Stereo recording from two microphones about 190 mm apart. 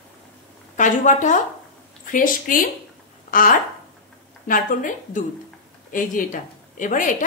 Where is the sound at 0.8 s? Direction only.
40° left (ahead or behind).